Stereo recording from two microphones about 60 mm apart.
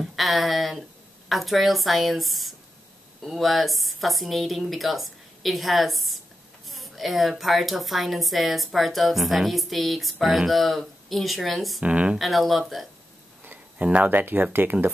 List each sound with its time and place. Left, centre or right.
0.0 s speech: centre
11.8 s speech: right
12.2 s speech: centre
13.4 s a sound: right
13.8 s speech: right
14.1 s speech: right